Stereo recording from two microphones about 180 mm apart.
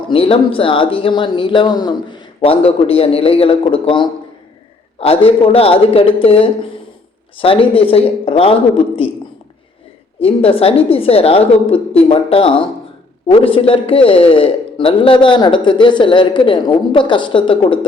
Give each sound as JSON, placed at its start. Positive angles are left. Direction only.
{"t": 0.1, "sound": "a woman's voice", "side_deg": 30}
{"t": 10.2, "sound": "a woman's voice", "side_deg": 30}